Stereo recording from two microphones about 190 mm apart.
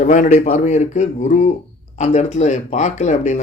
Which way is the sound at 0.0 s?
40° left (ahead or behind).